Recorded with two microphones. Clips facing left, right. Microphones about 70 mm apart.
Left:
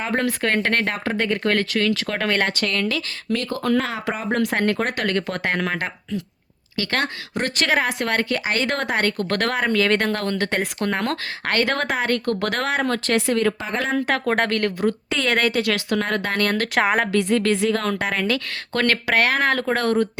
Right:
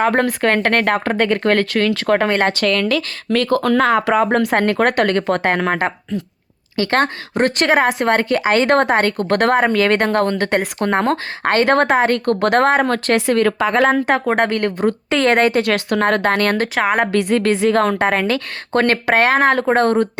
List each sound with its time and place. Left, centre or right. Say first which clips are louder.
0.0 s speech: right 7 dB; right
2.2 s speech: right 5 dB; right
2.6 s speech: right 7 dB; right
4.4 s speech: right 5 dB; right
13.6 s speech: right 10 dB; right
14.3 s speech: right 4 dB; centre
14.8 s speech: right 6 dB; right
15.4 s speech: right 6 dB; right
15.6 s speech: right 6 dB; right
16.7 s a woman's voice: right 2 dB; centre
17.1 s speech: right 3 dB; right